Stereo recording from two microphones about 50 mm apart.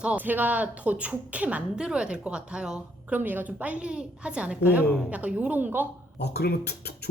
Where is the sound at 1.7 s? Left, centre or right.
Centre.